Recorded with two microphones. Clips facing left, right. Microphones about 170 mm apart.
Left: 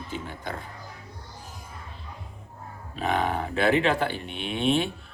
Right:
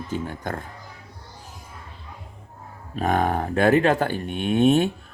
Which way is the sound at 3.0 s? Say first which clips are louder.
Right 4 dB; 45° right (ahead or behind).